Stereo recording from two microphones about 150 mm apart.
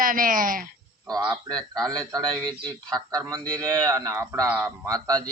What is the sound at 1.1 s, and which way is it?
Speech, 25° right (ahead or behind).